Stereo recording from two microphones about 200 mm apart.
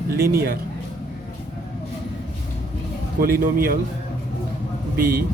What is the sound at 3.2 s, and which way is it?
Speech, 45° right (ahead or behind).